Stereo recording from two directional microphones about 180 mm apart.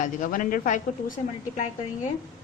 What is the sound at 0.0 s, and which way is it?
Speech, 50° left (ahead or behind).